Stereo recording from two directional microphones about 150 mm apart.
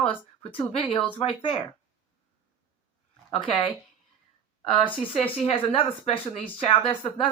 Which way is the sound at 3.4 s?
35° left (ahead or behind).